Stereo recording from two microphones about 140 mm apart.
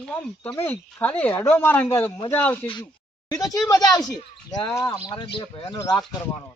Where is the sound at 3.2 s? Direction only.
25° left (ahead or behind).